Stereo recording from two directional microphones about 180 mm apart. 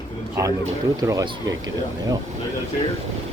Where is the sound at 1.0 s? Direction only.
20° right (ahead or behind).